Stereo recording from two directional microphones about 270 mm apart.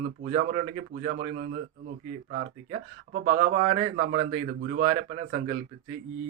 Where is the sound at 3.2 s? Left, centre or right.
Right.